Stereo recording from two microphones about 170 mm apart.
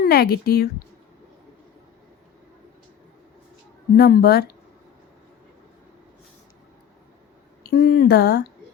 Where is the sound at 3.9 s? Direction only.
65° left (ahead or behind).